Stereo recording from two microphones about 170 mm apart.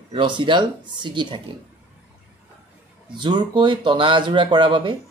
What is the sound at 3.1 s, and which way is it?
Speech, 25° right (ahead or behind).